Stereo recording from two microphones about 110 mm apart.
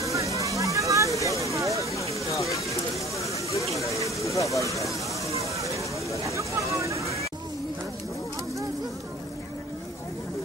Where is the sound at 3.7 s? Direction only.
30° left (ahead or behind).